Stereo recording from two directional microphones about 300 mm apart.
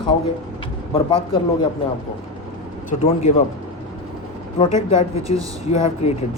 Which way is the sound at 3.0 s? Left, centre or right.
Left.